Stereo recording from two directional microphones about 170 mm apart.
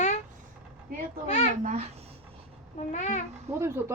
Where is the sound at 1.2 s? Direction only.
40° left (ahead or behind).